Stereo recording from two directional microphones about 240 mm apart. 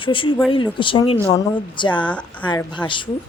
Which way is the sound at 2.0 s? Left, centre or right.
Centre.